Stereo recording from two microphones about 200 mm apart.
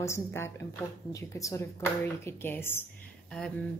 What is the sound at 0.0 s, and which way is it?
A woman's voice, 15° left (ahead or behind).